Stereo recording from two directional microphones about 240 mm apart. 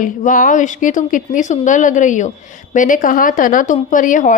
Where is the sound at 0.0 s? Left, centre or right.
Left.